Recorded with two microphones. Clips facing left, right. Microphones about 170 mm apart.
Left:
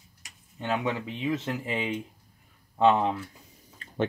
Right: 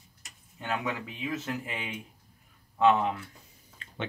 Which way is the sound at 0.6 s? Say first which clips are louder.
Left 4 dB; 30° left (ahead or behind).